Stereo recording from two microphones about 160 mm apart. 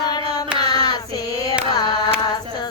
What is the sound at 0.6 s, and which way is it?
Child singing, 25° left (ahead or behind).